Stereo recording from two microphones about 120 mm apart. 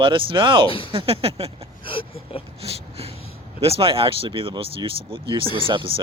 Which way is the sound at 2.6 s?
55° right (ahead or behind).